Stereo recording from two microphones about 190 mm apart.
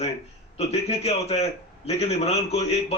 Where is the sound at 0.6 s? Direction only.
35° left (ahead or behind).